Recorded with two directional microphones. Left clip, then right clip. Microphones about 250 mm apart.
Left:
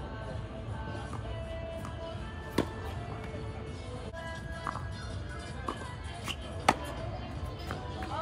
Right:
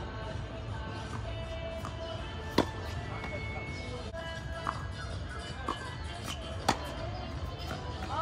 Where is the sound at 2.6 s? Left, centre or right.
Centre.